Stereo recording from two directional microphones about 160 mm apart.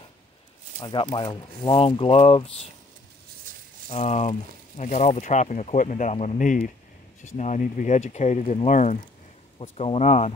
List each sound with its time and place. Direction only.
0.7 s speech: 25° left (ahead or behind)
3.9 s speech: 40° left (ahead or behind)